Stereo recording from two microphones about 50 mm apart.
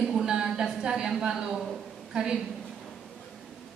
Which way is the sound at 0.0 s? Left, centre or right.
Centre.